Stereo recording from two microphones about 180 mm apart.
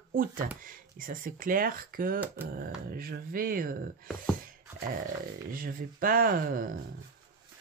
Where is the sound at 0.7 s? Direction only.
50° right (ahead or behind).